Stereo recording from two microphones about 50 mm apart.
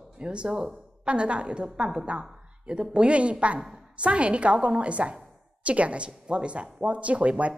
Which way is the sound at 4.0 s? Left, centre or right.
Right.